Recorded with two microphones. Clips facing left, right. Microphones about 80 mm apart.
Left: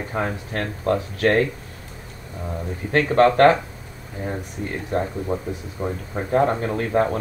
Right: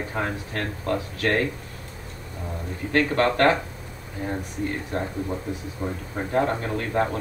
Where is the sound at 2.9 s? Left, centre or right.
Left.